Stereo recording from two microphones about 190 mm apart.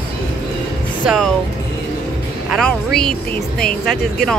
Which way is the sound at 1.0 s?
Centre (ahead or behind).